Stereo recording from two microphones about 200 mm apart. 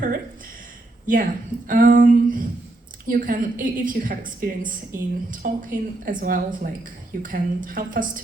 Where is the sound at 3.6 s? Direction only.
40° right (ahead or behind).